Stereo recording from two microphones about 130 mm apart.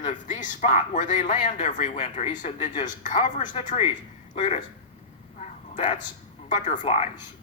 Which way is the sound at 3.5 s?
50° left (ahead or behind).